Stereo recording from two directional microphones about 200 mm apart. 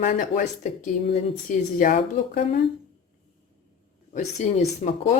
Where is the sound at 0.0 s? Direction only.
40° left (ahead or behind).